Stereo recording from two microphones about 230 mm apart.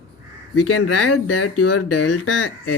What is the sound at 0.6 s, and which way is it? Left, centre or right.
Speech, left.